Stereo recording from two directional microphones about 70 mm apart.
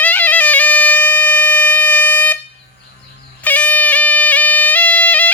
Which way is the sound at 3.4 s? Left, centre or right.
Left.